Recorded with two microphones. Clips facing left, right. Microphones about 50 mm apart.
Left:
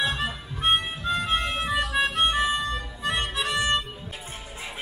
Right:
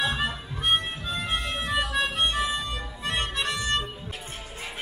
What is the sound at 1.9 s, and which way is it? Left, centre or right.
Harmonica, centre.